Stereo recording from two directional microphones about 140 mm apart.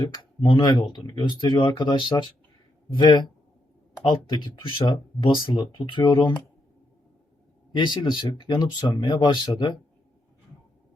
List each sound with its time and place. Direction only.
0.0 s speech: 35° left (ahead or behind)
7.7 s speech: 35° left (ahead or behind)